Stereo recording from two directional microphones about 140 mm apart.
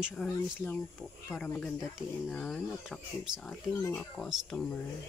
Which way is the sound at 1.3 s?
20° left (ahead or behind).